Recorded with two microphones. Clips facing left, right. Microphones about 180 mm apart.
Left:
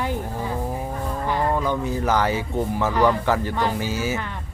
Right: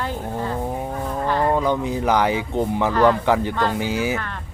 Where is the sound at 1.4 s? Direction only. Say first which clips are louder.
Right 3 dB; 15° right (ahead or behind).